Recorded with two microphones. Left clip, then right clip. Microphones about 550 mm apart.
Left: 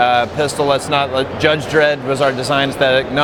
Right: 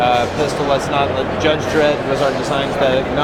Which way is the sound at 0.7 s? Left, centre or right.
Left.